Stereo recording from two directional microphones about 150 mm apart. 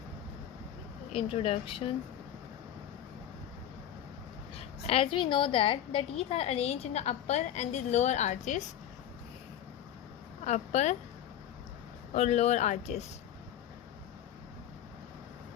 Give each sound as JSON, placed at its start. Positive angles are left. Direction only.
{"t": 1.1, "sound": "speech", "side_deg": 40}
{"t": 4.9, "sound": "a woman's voice", "side_deg": 35}
{"t": 10.4, "sound": "a woman's voice", "side_deg": 50}
{"t": 12.1, "sound": "a woman's voice", "side_deg": 50}